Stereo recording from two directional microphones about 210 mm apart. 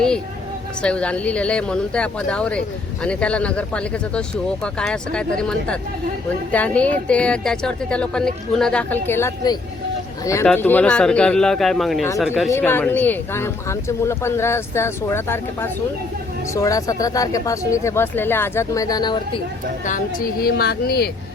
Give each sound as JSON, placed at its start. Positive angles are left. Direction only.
{"t": 0.8, "sound": "a woman's voice", "side_deg": 5}
{"t": 12.5, "sound": "speech", "side_deg": 10}
{"t": 19.8, "sound": "a woman's voice", "side_deg": 40}